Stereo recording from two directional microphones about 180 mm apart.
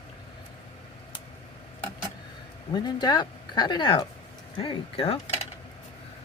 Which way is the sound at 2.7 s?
25° left (ahead or behind).